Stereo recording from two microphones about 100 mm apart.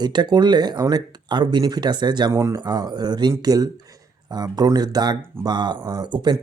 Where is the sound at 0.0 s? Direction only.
45° right (ahead or behind).